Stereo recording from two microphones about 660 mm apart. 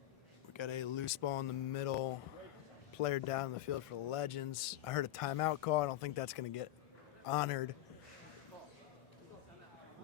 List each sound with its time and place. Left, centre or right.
0.5 s speech: left